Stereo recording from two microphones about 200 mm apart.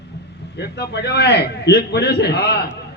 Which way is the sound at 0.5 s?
55° left (ahead or behind).